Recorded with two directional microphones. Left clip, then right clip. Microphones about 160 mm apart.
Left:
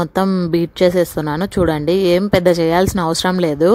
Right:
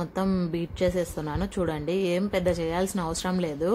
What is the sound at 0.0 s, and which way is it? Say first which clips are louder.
Speech: left 11 dB; 55° left (ahead or behind).